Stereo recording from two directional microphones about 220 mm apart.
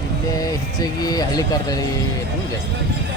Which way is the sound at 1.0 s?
15° left (ahead or behind).